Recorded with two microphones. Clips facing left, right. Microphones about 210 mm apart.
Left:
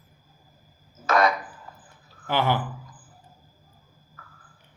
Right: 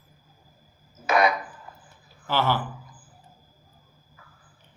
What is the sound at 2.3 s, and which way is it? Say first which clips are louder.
Speech: left 1 dB; 15° left (ahead or behind).